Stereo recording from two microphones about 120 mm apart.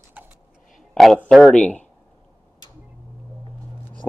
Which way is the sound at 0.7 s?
Centre (ahead or behind).